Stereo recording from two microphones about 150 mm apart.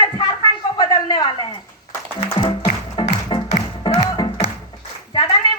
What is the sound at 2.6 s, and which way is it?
Music, 35° left (ahead or behind).